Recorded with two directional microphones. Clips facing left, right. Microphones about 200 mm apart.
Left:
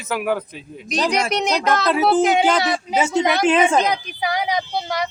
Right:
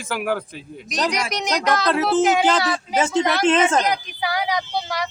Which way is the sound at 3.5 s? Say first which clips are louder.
Left 2 dB; 10° left (ahead or behind).